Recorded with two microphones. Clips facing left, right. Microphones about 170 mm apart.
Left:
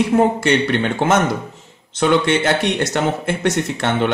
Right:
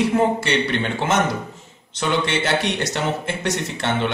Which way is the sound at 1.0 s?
50° left (ahead or behind).